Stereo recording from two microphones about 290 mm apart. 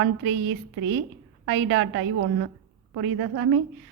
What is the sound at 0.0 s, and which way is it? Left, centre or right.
A woman's voice, right.